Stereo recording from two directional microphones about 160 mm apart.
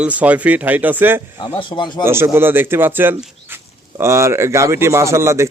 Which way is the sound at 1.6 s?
30° left (ahead or behind).